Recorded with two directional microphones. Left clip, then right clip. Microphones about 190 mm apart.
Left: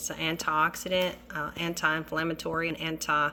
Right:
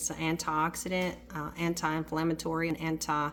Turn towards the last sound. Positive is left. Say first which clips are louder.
# left 4 dB
turn(degrees=-35)  # may be behind; listen again after turning